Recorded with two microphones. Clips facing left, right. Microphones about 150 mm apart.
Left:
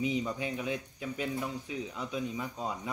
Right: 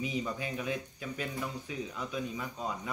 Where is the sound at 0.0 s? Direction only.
20° left (ahead or behind).